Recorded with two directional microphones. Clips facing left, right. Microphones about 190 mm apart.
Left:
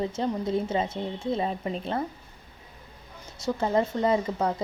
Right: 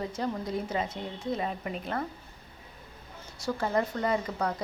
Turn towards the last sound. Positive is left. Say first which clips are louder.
# left 4 dB
turn(degrees=25)  # may be behind; listen again after turning